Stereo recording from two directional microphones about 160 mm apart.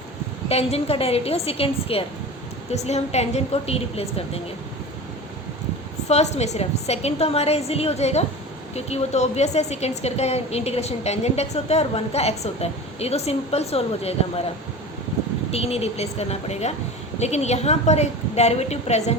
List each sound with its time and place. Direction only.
0.4 s a woman's voice: 40° left (ahead or behind)
6.1 s a woman's voice: 45° left (ahead or behind)
15.5 s a woman's voice: 40° left (ahead or behind)